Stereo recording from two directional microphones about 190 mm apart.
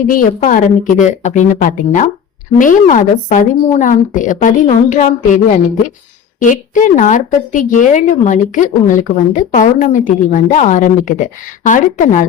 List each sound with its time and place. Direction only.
0.1 s a woman's voice: 45° left (ahead or behind)
6.4 s a woman's voice: 40° left (ahead or behind)